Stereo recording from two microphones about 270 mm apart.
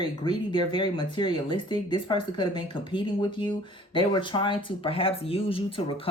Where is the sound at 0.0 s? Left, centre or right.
Centre.